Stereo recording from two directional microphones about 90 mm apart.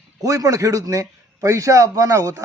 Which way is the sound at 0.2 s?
40° right (ahead or behind).